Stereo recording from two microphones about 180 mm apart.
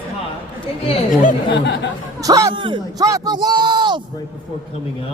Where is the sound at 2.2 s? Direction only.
20° right (ahead or behind).